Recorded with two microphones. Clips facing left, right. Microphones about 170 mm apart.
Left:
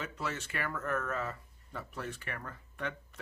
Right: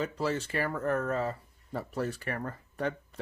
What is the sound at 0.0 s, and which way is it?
Speech, 35° right (ahead or behind).